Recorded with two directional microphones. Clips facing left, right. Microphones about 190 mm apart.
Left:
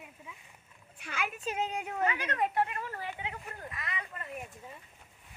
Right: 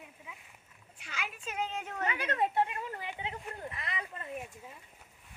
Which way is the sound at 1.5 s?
15° left (ahead or behind).